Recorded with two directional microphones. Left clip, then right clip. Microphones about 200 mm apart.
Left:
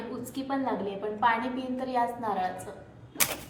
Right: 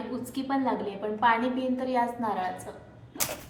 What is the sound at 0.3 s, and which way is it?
A woman's voice, 15° right (ahead or behind).